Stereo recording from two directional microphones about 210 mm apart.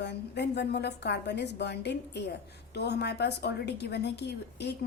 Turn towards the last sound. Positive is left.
turn(degrees=55)  # may be behind; listen again after turning